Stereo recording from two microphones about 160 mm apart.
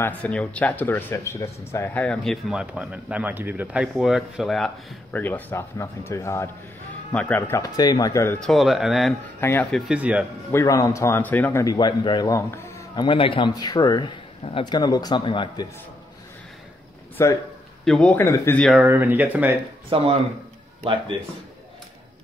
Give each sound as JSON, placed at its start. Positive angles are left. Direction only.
{"t": 0.0, "sound": "speech", "side_deg": 10}
{"t": 2.0, "sound": "a man's voice", "side_deg": 0}
{"t": 8.4, "sound": "speech", "side_deg": 0}
{"t": 9.4, "sound": "speech", "side_deg": 10}
{"t": 10.5, "sound": "speech", "side_deg": 20}
{"t": 11.6, "sound": "a man's voice", "side_deg": 25}
{"t": 17.2, "sound": "a man's voice", "side_deg": 20}
{"t": 17.8, "sound": "speech", "side_deg": 5}
{"t": 18.6, "sound": "speech", "side_deg": -5}
{"t": 19.9, "sound": "speech", "side_deg": -35}